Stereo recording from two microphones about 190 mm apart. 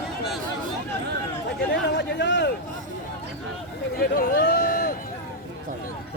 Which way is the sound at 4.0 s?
55° left (ahead or behind).